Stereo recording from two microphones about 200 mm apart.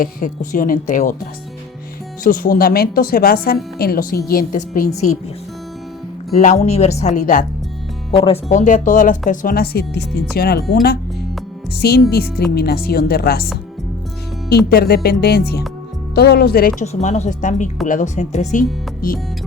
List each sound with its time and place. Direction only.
0.0 s speech: 40° left (ahead or behind)
6.3 s speech: 35° left (ahead or behind)
8.1 s speech: 25° left (ahead or behind)
8.4 s speech: 40° left (ahead or behind)
11.8 s speech: 55° left (ahead or behind)
14.5 s speech: 50° left (ahead or behind)
16.8 s speech: 35° left (ahead or behind)